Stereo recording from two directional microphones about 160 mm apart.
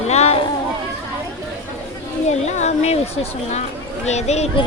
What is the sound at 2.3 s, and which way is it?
Speech, 45° left (ahead or behind).